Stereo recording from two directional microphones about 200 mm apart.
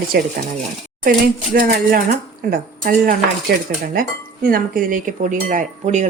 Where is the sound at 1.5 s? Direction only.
45° right (ahead or behind).